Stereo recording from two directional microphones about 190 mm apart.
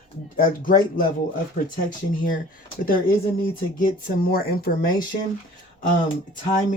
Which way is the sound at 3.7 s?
50° left (ahead or behind).